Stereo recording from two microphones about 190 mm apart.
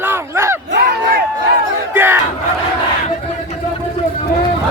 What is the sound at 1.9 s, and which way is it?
Battle cry, 10° right (ahead or behind).